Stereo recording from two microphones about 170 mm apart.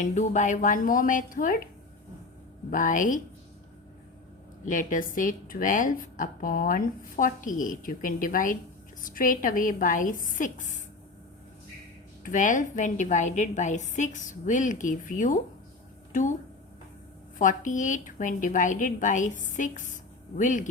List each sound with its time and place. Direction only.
0.0 s a woman's voice: 45° left (ahead or behind)
2.6 s a woman's voice: 50° left (ahead or behind)
4.6 s a woman's voice: 50° left (ahead or behind)
12.2 s a woman's voice: 50° left (ahead or behind)
17.3 s a woman's voice: 50° left (ahead or behind)